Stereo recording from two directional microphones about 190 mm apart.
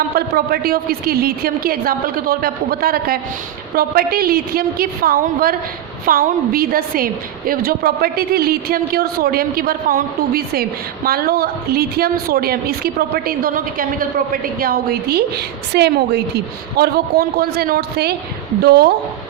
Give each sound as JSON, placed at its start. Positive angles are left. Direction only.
{"t": 0.2, "sound": "a woman's voice", "side_deg": -55}